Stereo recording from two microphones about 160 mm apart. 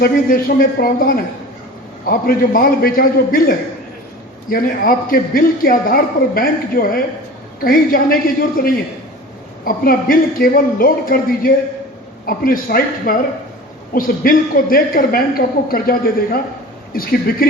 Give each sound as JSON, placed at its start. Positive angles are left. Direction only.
{"t": 0.0, "sound": "a man's voice", "side_deg": 65}
{"t": 9.6, "sound": "a man's voice", "side_deg": 65}